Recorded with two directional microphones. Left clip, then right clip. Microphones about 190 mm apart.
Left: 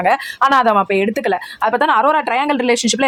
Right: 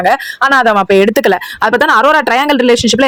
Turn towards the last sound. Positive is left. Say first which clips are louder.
# right 7 dB
turn(degrees=-20)  # may be behind; listen again after turning